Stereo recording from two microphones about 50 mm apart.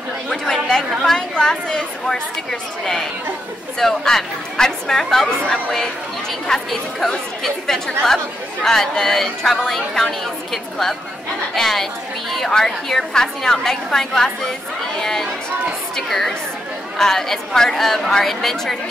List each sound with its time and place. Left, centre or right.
0.3 s chatter: centre
1.3 s a woman's voice: centre